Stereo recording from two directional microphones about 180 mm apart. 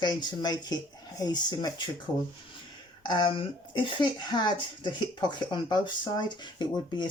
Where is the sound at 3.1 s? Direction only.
25° left (ahead or behind).